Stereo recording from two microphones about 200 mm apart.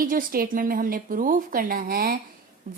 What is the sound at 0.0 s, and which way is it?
A woman's voice, 45° right (ahead or behind).